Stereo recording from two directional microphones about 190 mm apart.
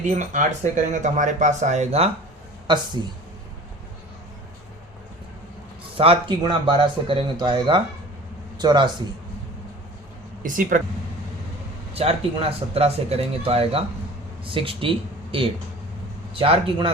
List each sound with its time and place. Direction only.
0.0 s speech: 40° right (ahead or behind)
2.6 s speech: 25° right (ahead or behind)
6.0 s a man's voice: 30° right (ahead or behind)
10.4 s speech: 45° right (ahead or behind)
11.9 s speech: 30° right (ahead or behind)